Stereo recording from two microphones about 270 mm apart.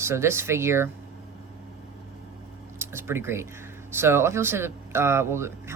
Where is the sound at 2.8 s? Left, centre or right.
Centre.